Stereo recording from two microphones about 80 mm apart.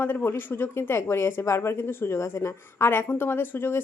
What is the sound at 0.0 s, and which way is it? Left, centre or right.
A woman's voice, left.